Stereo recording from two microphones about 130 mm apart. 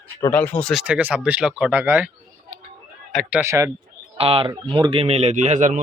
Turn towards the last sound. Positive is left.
turn(degrees=-80)